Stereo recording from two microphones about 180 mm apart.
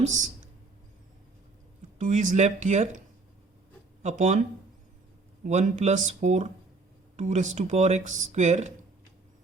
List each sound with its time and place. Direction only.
0.0 s speech: 40° right (ahead or behind)
2.0 s speech: 40° right (ahead or behind)
4.0 s speech: 40° right (ahead or behind)